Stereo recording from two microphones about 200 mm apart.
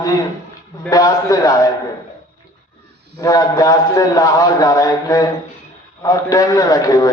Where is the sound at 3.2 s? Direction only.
15° left (ahead or behind).